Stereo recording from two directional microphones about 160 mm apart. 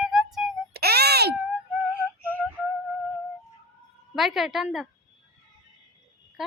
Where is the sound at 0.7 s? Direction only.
80° right.